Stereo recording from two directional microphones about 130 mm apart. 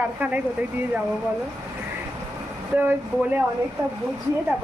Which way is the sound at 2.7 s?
15° right (ahead or behind).